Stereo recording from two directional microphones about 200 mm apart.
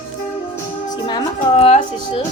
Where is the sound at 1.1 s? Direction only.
30° left (ahead or behind).